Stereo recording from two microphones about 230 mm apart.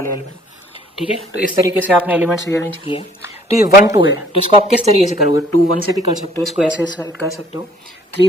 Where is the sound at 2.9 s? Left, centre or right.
Left.